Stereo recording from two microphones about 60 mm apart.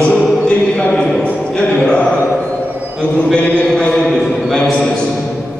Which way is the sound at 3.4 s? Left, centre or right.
Left.